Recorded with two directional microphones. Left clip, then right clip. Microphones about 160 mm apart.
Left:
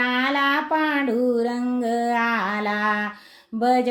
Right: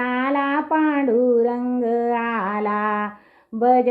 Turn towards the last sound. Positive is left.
turn(degrees=20)  # may be behind; listen again after turning